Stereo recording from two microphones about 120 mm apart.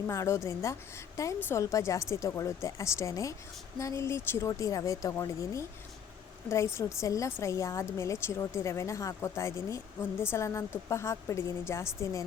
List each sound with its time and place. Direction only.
0.1 s speech: 25° left (ahead or behind)
6.7 s speech: 25° left (ahead or behind)